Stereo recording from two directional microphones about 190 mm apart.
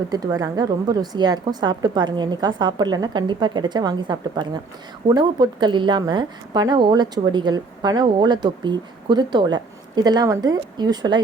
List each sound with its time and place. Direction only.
0.1 s a woman's voice: 20° right (ahead or behind)